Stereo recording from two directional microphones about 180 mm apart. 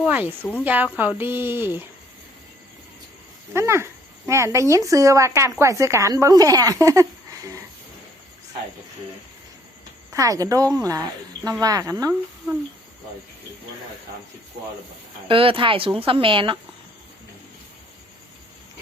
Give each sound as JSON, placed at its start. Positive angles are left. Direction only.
{"t": 0.0, "sound": "speech", "side_deg": -10}
{"t": 3.5, "sound": "speech", "side_deg": -15}
{"t": 10.1, "sound": "speech", "side_deg": -20}
{"t": 15.3, "sound": "speech", "side_deg": -30}